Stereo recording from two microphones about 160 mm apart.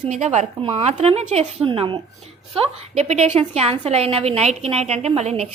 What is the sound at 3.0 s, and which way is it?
A woman's voice, 45° right (ahead or behind).